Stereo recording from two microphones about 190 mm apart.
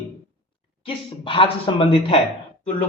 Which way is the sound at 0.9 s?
30° left (ahead or behind).